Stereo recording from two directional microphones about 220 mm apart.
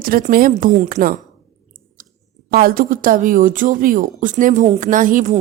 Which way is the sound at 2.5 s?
45° right (ahead or behind).